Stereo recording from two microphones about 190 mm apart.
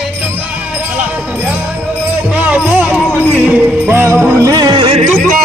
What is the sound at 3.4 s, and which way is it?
Music, 5° right (ahead or behind).